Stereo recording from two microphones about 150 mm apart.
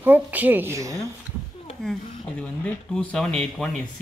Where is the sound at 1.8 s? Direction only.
5° left (ahead or behind).